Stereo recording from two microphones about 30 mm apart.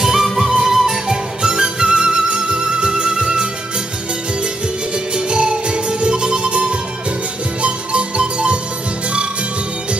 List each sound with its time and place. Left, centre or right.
0.0 s music: centre; by 3.4 s right
5.1 s music: right
7.6 s music: right